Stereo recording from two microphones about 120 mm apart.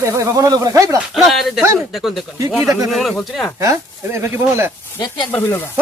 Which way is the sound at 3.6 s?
25° right (ahead or behind).